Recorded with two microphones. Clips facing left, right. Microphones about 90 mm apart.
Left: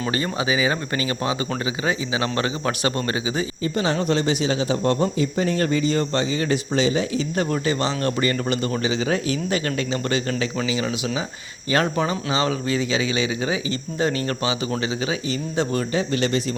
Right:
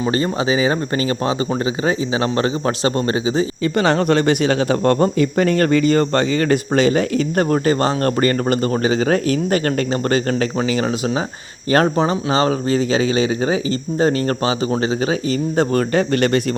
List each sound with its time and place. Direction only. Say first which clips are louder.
0.1 s speech: right 4 dB; 35° right (ahead or behind)
3.8 s speech: right 6 dB; 65° right (ahead or behind)